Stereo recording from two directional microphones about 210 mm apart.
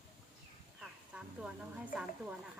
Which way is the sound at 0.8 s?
5° right (ahead or behind).